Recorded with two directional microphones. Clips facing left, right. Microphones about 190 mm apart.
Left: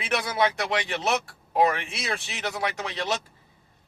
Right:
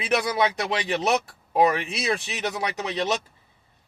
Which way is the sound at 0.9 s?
20° right (ahead or behind).